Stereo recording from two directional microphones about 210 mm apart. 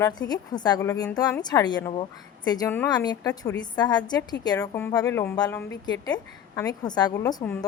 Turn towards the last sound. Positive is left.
turn(degrees=15)  # may be behind; listen again after turning